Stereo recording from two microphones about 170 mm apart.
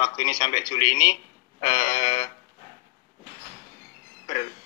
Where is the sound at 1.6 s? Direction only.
45° left (ahead or behind).